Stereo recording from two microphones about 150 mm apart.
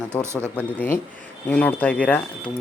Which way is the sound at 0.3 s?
10° left (ahead or behind).